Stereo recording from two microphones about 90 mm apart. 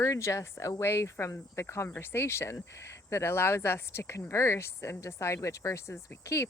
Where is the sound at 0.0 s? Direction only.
35° left (ahead or behind).